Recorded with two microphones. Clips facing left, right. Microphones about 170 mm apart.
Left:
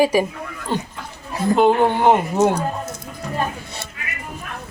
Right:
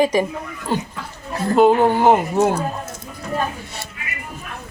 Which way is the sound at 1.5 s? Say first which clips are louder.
Right 2 dB; centre (ahead or behind).